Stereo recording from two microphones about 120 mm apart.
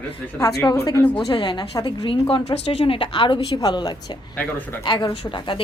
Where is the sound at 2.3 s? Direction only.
55° left (ahead or behind).